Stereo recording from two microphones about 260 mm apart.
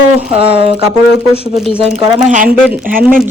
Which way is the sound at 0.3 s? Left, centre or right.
Right.